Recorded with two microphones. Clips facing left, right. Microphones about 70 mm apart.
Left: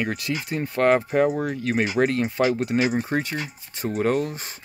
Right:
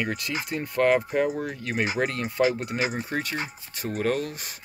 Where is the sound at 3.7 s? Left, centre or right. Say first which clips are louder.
Left 4 dB; left.